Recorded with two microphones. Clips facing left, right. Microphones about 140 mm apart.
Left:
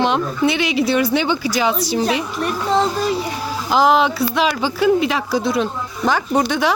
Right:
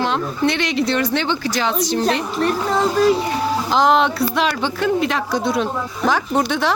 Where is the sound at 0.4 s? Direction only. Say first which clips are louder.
Left 1 dB; 5° left (ahead or behind).